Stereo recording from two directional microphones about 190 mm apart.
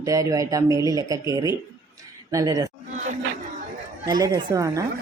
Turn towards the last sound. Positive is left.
turn(degrees=-20)  # may be behind; listen again after turning